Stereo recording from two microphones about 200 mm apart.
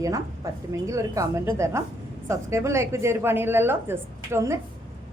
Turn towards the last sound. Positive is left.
turn(degrees=-15)  # may be behind; listen again after turning